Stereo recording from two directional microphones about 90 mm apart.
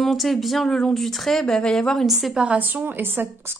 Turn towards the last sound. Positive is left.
turn(degrees=-20)  # may be behind; listen again after turning